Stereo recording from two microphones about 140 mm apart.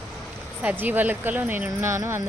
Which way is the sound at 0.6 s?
10° right (ahead or behind).